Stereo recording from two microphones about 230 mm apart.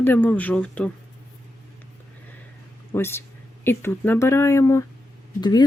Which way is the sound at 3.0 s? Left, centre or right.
Centre.